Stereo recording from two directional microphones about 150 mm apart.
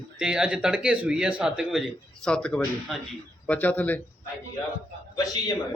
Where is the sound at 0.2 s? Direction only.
5° right (ahead or behind); by 4.0 s 10° left (ahead or behind).